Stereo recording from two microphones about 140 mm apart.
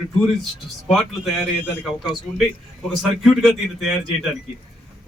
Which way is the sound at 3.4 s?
Centre (ahead or behind).